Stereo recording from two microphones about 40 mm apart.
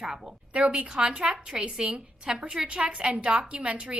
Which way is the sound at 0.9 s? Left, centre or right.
Right.